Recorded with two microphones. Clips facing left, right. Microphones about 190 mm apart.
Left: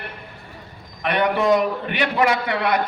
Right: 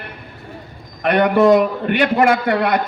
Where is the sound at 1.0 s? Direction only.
50° right (ahead or behind).